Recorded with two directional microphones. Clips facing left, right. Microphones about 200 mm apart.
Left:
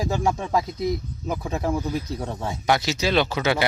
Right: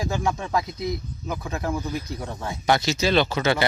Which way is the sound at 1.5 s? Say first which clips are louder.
Left 3 dB; 30° left (ahead or behind).